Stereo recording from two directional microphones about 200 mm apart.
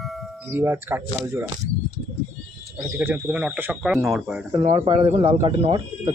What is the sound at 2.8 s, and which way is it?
Speech, 10° right (ahead or behind).